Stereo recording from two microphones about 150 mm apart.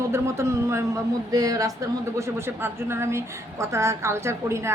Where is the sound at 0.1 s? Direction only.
20° right (ahead or behind).